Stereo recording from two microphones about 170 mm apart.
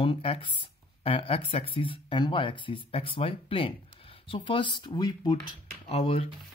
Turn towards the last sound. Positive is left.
turn(degrees=35)  # may be behind; listen again after turning